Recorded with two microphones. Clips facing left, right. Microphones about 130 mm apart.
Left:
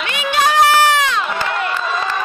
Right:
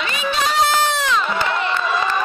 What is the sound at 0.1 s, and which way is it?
Crowd, 75° left (ahead or behind).